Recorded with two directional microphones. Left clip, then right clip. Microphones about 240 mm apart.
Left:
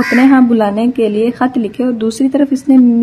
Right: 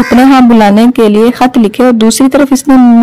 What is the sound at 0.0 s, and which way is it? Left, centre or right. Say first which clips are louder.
A woman's voice: right 5 dB; right.